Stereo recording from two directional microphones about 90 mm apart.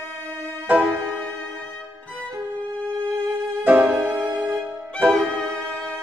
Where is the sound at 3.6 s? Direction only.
15° right (ahead or behind).